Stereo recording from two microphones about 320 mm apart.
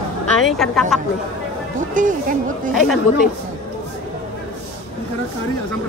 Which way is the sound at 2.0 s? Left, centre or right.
Right.